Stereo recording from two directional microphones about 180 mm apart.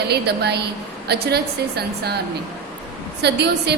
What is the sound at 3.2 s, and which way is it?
Speech, 70° right (ahead or behind).